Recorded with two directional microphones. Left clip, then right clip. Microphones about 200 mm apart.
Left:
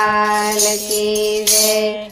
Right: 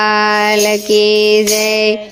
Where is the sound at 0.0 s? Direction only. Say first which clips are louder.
Right 4 dB; 45° right (ahead or behind).